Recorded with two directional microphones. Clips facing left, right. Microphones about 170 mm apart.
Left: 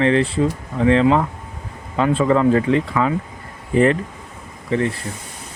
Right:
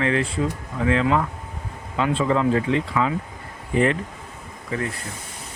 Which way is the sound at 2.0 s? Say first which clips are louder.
Left 5 dB; 45° left (ahead or behind).